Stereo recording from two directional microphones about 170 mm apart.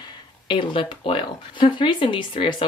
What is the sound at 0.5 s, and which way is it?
A woman's voice, 30° left (ahead or behind).